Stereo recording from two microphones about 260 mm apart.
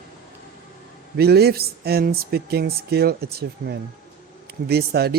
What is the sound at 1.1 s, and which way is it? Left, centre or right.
Speech, right.